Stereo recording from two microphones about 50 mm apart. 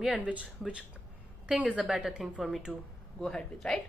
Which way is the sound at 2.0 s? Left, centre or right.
Centre.